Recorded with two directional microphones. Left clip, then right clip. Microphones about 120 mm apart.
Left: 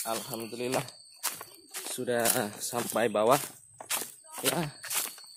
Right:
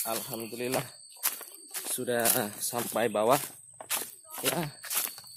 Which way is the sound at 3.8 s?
Centre (ahead or behind).